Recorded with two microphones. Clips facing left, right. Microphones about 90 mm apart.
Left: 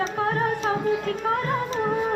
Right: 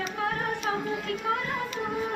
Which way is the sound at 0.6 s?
40° left (ahead or behind).